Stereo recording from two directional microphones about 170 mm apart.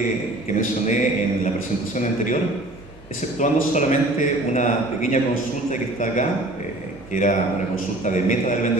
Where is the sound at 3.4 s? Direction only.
45° left (ahead or behind).